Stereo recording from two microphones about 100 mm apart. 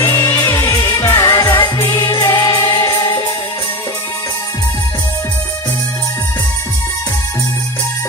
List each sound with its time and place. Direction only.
0.0 s music: 25° left (ahead or behind)
0.7 s music of asia: 35° left (ahead or behind)